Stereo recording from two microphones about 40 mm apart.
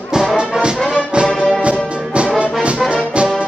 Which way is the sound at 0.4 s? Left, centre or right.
Right.